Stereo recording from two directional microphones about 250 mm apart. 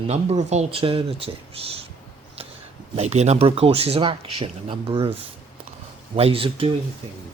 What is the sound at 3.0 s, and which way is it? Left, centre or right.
Speech, right.